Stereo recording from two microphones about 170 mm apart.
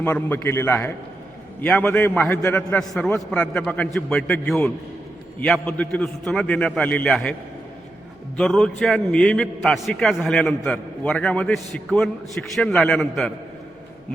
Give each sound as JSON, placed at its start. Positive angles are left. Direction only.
{"t": 0.0, "sound": "a man's voice", "side_deg": 10}
{"t": 8.4, "sound": "a man's voice", "side_deg": 5}